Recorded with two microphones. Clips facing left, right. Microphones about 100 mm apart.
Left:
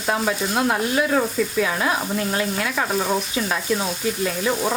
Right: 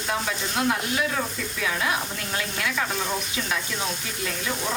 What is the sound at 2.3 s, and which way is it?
Stir, 40° left (ahead or behind).